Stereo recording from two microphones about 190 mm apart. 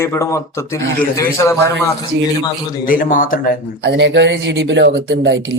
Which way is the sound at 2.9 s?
45° left (ahead or behind).